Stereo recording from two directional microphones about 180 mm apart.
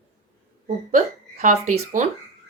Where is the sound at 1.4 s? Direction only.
40° right (ahead or behind).